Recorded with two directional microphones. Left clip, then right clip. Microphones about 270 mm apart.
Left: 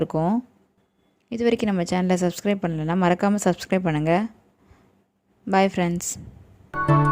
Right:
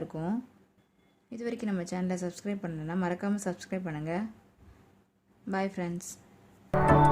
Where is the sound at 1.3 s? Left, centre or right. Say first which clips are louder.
Left 13 dB; left.